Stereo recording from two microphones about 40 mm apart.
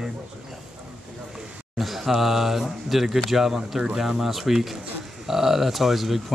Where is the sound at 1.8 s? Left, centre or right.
Centre.